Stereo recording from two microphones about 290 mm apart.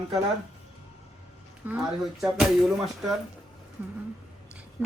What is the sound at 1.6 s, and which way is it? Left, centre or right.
Speech, centre.